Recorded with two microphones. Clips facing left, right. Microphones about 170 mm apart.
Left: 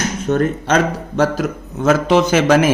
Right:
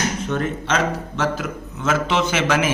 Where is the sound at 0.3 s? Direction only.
40° left (ahead or behind).